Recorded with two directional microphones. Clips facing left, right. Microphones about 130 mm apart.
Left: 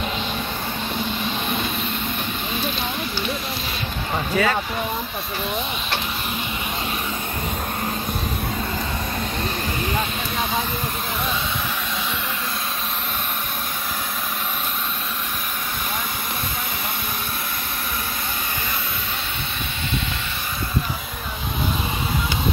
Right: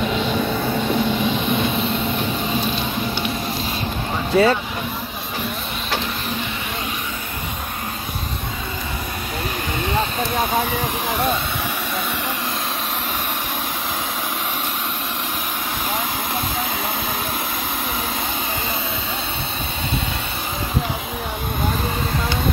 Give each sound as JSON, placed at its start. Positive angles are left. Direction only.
{"t": 4.3, "sound": "speech", "side_deg": -30}